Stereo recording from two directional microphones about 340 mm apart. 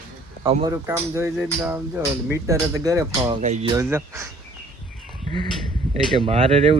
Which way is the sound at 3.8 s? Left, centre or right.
Centre.